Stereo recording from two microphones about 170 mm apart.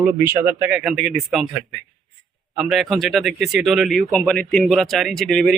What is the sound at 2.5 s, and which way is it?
Speech, centre (ahead or behind).